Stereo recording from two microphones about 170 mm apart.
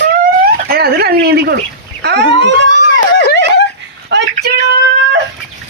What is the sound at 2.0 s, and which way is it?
Fowl, 90° right.